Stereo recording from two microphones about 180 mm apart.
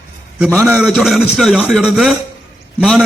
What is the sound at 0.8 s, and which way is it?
A man's voice, centre (ahead or behind).